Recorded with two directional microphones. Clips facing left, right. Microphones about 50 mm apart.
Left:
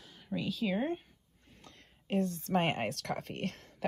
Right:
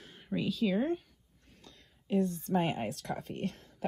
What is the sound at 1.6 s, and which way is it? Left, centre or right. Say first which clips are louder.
Speech: left 1 dB; left.